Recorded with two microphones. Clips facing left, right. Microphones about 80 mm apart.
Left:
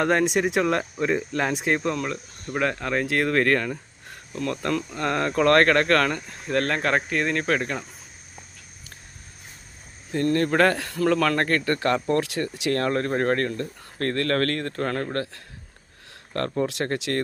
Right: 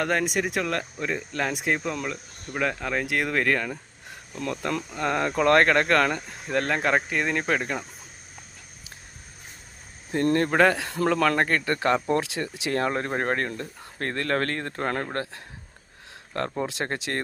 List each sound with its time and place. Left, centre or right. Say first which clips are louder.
0.0 s speech: left 4 dB; centre
10.1 s speech: even; right
10.5 s speech: even; centre